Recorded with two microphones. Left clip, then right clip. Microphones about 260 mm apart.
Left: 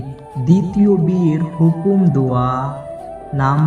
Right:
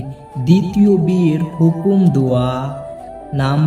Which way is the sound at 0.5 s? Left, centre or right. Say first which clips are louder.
Right 1 dB; centre.